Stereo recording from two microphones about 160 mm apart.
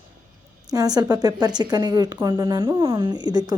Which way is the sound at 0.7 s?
25° right (ahead or behind).